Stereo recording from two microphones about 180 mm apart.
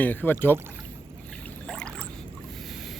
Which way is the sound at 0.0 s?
10° left (ahead or behind).